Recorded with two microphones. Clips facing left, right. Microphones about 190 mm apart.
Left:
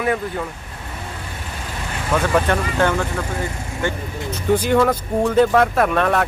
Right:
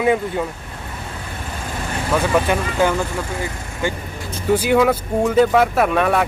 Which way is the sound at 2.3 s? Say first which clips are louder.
Even; 10° right (ahead or behind).